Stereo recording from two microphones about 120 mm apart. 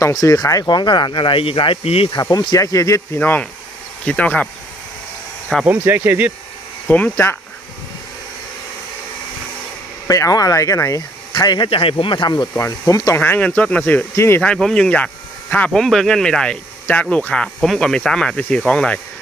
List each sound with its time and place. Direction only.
0.0 s speech: 30° left (ahead or behind); by 2.0 s 55° left (ahead or behind)
2.6 s speech: 25° left (ahead or behind)
3.2 s speech: 15° left (ahead or behind)
5.6 s speech: 15° right (ahead or behind)
6.8 s speech: 15° left (ahead or behind)
10.1 s speech: 30° left (ahead or behind)
11.3 s speech: 40° left (ahead or behind)
13.2 s speech: 15° left (ahead or behind)
14.4 s speech: 5° left (ahead or behind)